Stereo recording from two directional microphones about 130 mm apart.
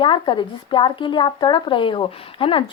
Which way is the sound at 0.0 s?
40° left (ahead or behind).